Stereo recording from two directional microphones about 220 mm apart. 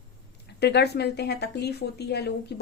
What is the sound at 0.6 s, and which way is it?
A woman's voice, 50° left (ahead or behind).